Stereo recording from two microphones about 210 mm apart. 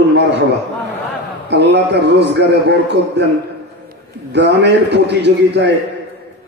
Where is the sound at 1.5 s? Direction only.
55° right (ahead or behind).